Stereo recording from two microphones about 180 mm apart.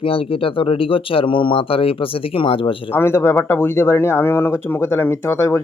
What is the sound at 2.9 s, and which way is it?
Speech, 10° left (ahead or behind).